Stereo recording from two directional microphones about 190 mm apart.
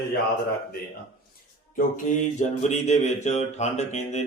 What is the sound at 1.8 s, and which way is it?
Mantra, 40° left (ahead or behind).